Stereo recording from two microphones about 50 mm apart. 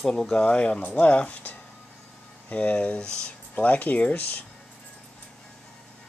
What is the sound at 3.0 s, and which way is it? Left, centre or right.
Speech, centre.